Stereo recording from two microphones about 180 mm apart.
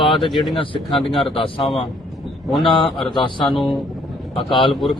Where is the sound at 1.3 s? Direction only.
30° left (ahead or behind).